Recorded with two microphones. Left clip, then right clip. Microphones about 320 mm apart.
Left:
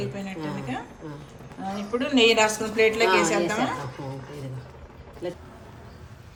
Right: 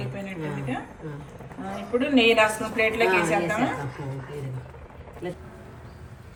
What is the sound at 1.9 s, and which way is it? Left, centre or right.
A woman's voice, centre.